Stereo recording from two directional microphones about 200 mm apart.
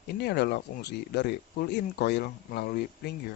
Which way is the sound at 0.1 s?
55° left (ahead or behind).